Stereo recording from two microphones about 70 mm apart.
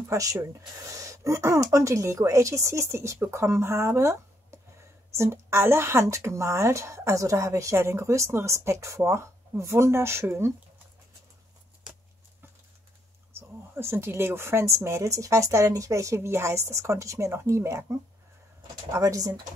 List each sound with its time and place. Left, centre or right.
0.1 s a woman's voice: right
13.3 s speech: right
18.9 s speech: right